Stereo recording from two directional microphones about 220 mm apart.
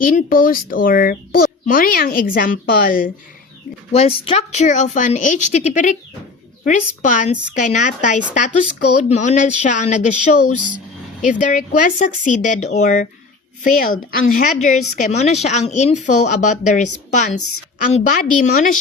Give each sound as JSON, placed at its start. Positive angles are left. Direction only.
{"t": 0.0, "sound": "a woman's voice", "side_deg": 40}
{"t": 3.9, "sound": "a woman's voice", "side_deg": 25}